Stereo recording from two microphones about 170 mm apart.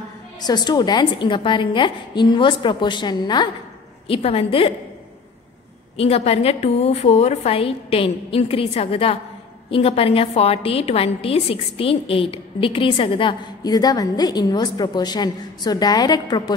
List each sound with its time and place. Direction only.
0.4 s a woman's voice: 25° left (ahead or behind)
4.1 s a woman's voice: 35° left (ahead or behind)
5.9 s a woman's voice: 35° left (ahead or behind)